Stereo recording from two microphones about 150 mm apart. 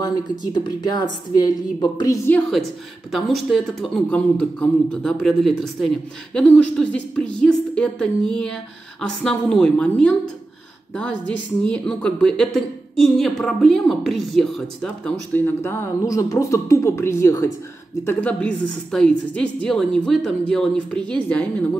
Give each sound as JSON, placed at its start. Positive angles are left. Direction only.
{"t": 0.0, "sound": "a woman's voice", "side_deg": 25}
{"t": 2.2, "sound": "a woman's voice", "side_deg": 10}
{"t": 3.1, "sound": "a woman's voice", "side_deg": 0}
{"t": 18.0, "sound": "a woman's voice", "side_deg": 10}